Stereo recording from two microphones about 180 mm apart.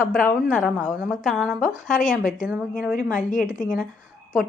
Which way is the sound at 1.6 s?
50° left (ahead or behind).